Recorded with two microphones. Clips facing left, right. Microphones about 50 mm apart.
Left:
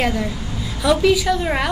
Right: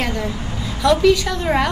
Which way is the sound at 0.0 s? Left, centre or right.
Centre.